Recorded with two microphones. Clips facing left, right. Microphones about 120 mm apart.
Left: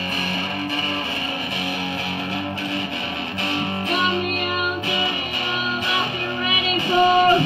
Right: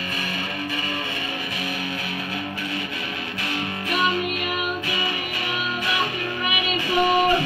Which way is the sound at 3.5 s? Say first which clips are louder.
Left 3 dB; 25° left (ahead or behind).